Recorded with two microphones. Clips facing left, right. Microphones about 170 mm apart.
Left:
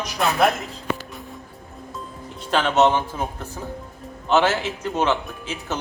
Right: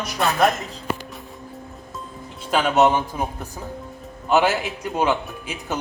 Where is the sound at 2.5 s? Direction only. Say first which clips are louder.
Right 1 dB; 10° right (ahead or behind).